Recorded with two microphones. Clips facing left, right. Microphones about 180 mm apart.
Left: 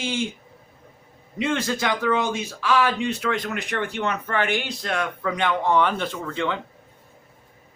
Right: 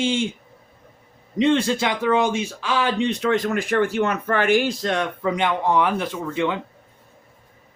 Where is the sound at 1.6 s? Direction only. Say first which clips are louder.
Right 3 dB; 15° right (ahead or behind).